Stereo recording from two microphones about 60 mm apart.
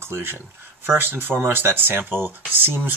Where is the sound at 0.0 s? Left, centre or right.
Right.